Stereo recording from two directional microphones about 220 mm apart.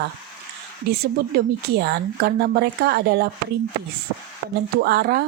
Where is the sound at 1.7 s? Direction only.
45° right (ahead or behind).